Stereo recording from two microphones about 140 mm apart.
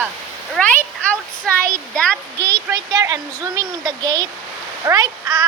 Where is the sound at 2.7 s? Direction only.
25° right (ahead or behind).